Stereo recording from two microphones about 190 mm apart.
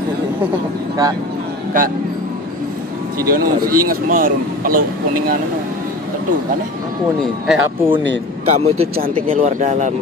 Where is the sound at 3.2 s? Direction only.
50° right (ahead or behind).